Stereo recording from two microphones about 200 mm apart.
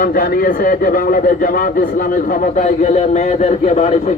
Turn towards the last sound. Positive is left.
turn(degrees=35)  # may be behind; listen again after turning